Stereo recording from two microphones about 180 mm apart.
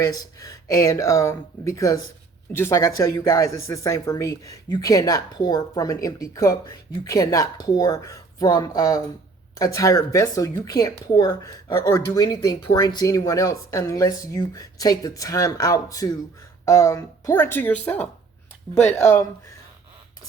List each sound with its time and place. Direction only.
0.0 s speech: 20° left (ahead or behind)
18.7 s speech: 35° left (ahead or behind)
18.9 s speech: 15° left (ahead or behind)